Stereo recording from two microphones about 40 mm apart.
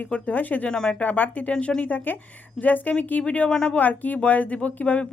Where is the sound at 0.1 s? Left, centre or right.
Left.